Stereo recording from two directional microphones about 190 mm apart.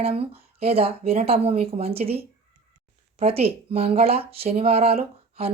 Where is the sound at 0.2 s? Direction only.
30° right (ahead or behind).